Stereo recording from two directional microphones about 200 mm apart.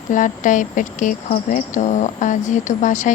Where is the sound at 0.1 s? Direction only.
40° left (ahead or behind).